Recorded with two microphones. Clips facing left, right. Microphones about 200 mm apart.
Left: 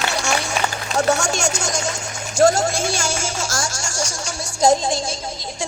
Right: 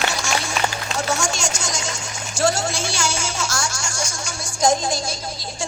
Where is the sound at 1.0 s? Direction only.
65° left (ahead or behind); by 3.6 s 50° left (ahead or behind).